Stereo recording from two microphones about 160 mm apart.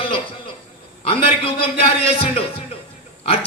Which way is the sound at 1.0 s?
35° left (ahead or behind).